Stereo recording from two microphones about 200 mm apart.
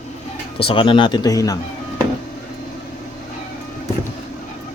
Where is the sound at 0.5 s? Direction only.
25° left (ahead or behind).